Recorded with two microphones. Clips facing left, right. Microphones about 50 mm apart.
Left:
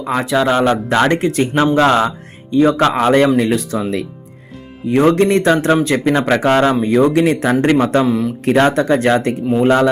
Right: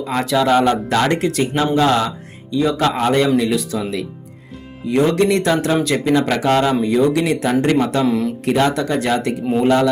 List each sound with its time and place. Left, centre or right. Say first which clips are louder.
0.1 s speech: left 1 dB; centre; by 8.0 s left
8.0 s speech: left 1 dB; centre
8.5 s speech: left 5 dB; left